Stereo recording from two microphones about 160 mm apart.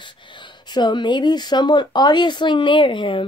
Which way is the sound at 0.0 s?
30° left (ahead or behind).